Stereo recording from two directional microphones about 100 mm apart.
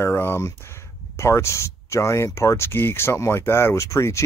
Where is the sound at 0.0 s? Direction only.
25° left (ahead or behind).